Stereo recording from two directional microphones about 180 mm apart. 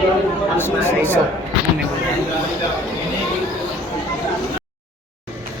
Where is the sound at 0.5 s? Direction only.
10° left (ahead or behind).